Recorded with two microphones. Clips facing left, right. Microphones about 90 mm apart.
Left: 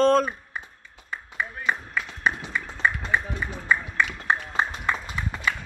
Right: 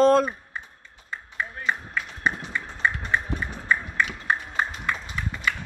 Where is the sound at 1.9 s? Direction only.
5° left (ahead or behind).